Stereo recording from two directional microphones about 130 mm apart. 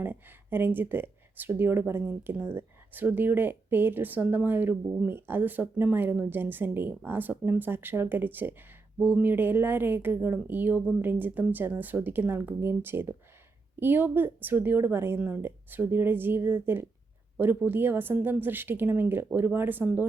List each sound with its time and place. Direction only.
0.0 s speech: 15° right (ahead or behind)